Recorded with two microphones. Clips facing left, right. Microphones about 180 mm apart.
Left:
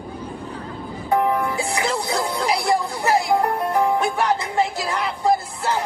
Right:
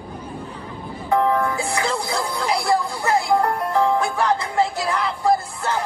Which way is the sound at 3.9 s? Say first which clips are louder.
Even; 25° left (ahead or behind).